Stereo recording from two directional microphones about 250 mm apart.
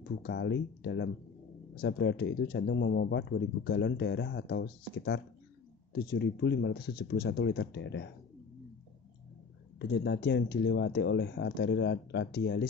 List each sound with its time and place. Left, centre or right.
0.2 s speech: left
9.8 s speech: left